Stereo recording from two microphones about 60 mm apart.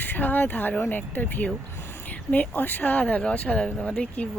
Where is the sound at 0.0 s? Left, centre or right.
Left.